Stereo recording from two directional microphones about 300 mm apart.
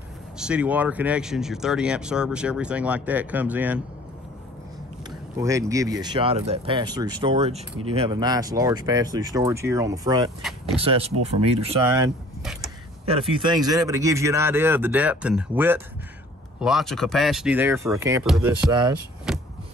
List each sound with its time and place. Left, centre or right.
0.4 s speech: centre
5.4 s speech: centre
10.4 s vehicle: centre
10.8 s speech: centre
18.7 s speech: centre
19.3 s vehicle: centre